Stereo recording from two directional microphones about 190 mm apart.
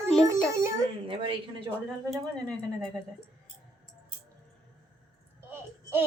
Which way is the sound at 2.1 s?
5° left (ahead or behind).